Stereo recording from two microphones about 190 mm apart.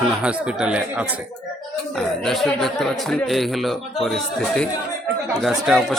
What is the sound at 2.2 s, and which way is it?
Speech, centre (ahead or behind).